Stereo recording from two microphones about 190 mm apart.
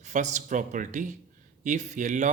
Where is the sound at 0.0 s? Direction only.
40° right (ahead or behind).